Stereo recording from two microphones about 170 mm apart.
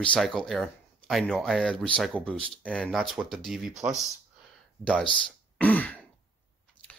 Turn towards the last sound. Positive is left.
turn(degrees=10)  # may be behind; listen again after turning